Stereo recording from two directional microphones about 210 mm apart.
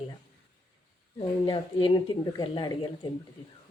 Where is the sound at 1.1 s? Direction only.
25° left (ahead or behind).